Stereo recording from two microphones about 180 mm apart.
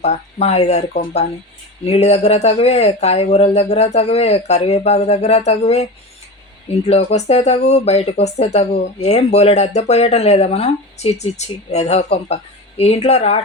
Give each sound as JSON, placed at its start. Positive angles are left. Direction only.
{"t": 0.0, "sound": "speech", "side_deg": 35}